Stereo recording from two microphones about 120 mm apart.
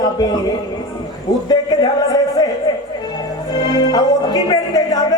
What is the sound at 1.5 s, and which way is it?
Speech, 35° left (ahead or behind).